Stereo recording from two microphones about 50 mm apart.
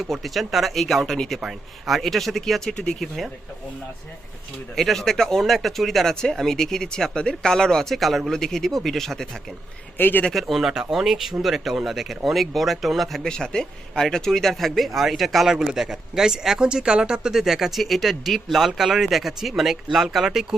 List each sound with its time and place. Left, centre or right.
0.0 s speech: centre
1.4 s speech: centre
4.7 s speech: centre
10.0 s speech: left
10.3 s speech: centre
10.7 s speech: centre
13.2 s speech: centre